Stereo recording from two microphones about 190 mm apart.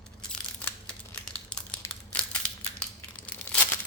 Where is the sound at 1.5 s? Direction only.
5° left (ahead or behind).